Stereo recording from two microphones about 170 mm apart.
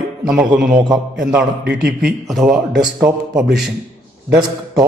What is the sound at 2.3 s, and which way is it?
Speech, centre (ahead or behind).